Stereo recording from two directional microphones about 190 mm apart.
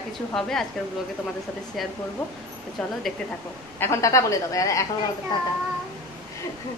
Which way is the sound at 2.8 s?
5° left (ahead or behind).